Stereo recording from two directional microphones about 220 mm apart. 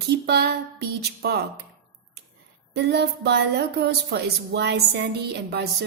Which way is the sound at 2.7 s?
50° right (ahead or behind).